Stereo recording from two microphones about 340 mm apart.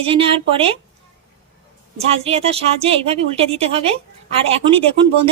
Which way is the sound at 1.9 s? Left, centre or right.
Centre.